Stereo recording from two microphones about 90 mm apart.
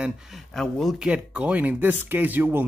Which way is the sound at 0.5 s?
5° left (ahead or behind).